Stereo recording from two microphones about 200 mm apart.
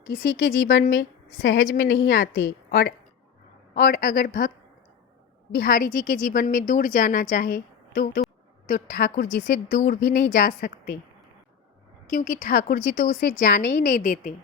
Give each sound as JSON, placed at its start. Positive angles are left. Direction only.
{"t": 0.1, "sound": "a woman's voice", "side_deg": 75}
{"t": 3.8, "sound": "speech", "side_deg": 40}
{"t": 5.5, "sound": "a woman's voice", "side_deg": 40}
{"t": 8.6, "sound": "speech", "side_deg": 40}
{"t": 12.1, "sound": "speech", "side_deg": 40}